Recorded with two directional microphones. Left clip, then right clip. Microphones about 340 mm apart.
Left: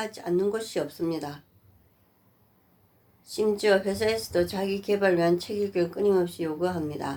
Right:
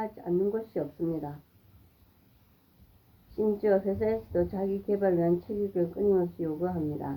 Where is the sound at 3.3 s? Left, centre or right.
Left.